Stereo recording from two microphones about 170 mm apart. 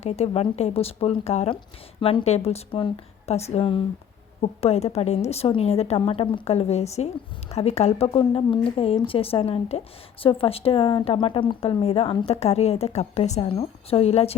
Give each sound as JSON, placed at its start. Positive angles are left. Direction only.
{"t": 0.0, "sound": "a woman's voice", "side_deg": 40}